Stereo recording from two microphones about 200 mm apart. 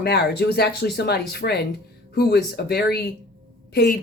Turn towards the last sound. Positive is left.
turn(degrees=55)  # may be behind; listen again after turning